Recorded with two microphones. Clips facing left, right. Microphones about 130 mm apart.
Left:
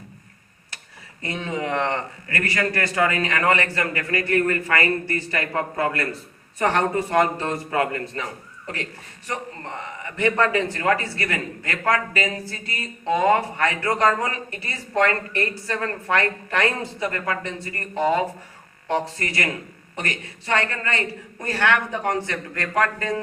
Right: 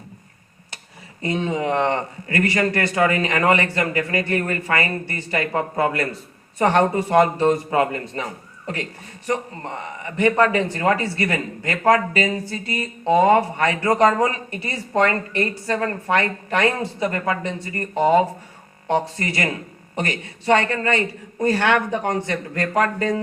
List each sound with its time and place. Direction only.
1.2 s a man's voice: 20° right (ahead or behind)